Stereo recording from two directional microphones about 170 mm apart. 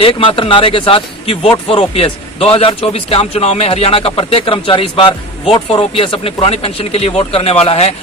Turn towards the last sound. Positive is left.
turn(degrees=35)  # may be behind; listen again after turning